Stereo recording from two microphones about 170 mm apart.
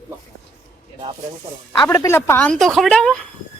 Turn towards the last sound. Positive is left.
turn(degrees=5)  # may be behind; listen again after turning